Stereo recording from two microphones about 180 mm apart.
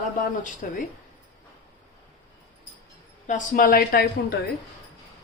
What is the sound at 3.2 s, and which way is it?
Speech, 45° left (ahead or behind).